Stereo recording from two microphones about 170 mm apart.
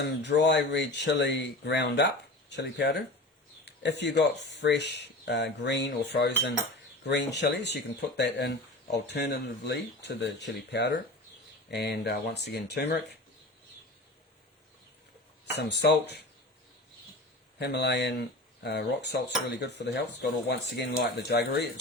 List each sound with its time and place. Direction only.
0.0 s speech: 90° left
11.7 s speech: 75° left (ahead or behind)
15.5 s speech: 80° left
17.6 s speech: 80° left